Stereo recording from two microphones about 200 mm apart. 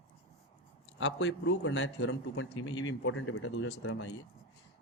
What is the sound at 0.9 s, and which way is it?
A man's voice, 70° left (ahead or behind).